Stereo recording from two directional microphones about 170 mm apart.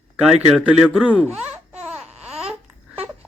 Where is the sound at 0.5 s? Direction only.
5° right (ahead or behind).